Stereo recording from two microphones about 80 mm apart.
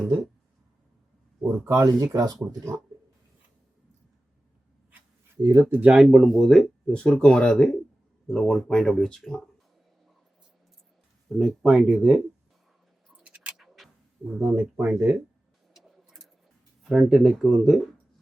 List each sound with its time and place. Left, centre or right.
1.4 s speech: right
5.4 s speech: right
5.6 s speech: centre
6.0 s speech: centre
11.3 s speech: centre
13.2 s a sound: centre
13.6 s a sound: centre
14.3 s speech: right
15.7 s pigeon: centre
16.8 s speech: centre